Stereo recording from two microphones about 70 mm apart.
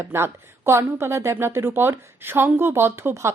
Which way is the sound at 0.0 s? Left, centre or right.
Right.